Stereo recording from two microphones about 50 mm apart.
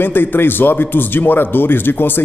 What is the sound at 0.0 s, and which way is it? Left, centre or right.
A man's voice, left.